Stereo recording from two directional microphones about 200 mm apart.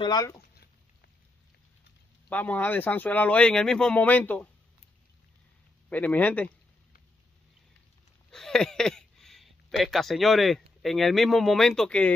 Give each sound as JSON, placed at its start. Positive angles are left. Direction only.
{"t": 0.0, "sound": "speech", "side_deg": 20}
{"t": 2.2, "sound": "speech", "side_deg": 10}
{"t": 5.9, "sound": "speech", "side_deg": 10}
{"t": 8.3, "sound": "speech", "side_deg": 5}